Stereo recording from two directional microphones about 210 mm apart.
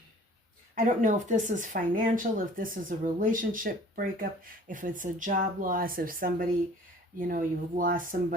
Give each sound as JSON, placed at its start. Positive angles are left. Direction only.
{"t": 0.8, "sound": "speech", "side_deg": -35}